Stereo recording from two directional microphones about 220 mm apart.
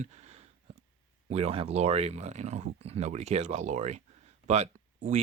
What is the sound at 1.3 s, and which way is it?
Speech, 30° right (ahead or behind).